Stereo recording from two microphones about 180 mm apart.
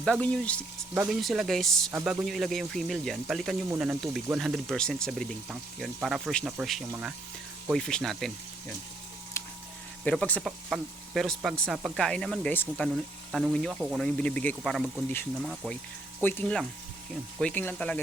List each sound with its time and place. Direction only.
0.0 s speech: 5° left (ahead or behind)
9.4 s a sound: 15° left (ahead or behind)
10.0 s speech: 5° left (ahead or behind)